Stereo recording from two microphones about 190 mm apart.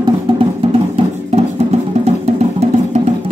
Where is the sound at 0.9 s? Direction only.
35° right (ahead or behind).